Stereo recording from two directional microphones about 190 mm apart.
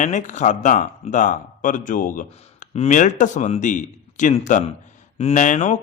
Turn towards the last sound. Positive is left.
turn(degrees=40)  # may be behind; listen again after turning